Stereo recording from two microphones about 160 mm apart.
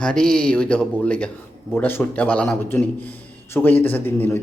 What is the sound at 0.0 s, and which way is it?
A man's voice, 5° left (ahead or behind).